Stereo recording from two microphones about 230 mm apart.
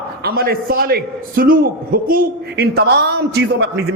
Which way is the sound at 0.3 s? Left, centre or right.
Right.